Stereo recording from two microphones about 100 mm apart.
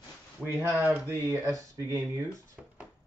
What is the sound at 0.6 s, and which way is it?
Speech, 20° right (ahead or behind).